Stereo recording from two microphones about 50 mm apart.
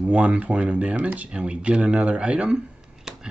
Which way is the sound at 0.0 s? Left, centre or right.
Right.